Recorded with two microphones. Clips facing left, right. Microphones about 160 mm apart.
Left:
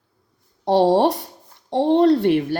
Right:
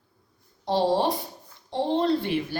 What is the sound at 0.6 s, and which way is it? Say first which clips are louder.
A woman's voice: left 7 dB; 75° left (ahead or behind).